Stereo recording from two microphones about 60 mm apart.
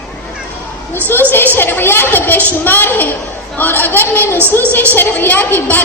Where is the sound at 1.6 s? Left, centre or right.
Left.